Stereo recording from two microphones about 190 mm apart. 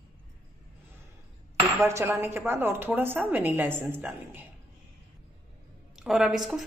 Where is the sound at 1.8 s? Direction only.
15° right (ahead or behind).